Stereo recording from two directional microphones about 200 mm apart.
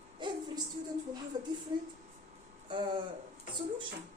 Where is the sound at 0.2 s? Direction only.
25° right (ahead or behind).